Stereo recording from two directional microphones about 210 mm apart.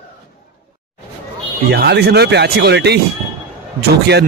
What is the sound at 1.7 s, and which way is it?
Speech, 50° right (ahead or behind).